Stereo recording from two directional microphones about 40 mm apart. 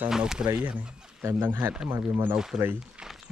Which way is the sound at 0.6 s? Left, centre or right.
Right.